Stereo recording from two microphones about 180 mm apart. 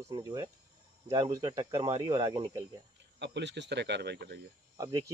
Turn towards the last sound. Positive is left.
turn(degrees=-20)  # may be behind; listen again after turning